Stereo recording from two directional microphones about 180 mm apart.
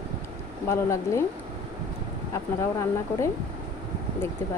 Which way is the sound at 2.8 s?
15° left (ahead or behind).